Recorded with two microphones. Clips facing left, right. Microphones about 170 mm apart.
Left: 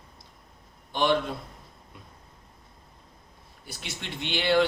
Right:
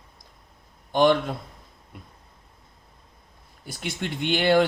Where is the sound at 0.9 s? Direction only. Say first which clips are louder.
Right 6 dB; 50° right (ahead or behind).